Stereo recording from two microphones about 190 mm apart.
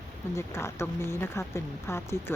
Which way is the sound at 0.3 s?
15° left (ahead or behind).